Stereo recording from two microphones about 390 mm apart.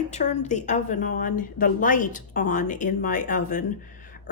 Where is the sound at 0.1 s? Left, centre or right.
Centre.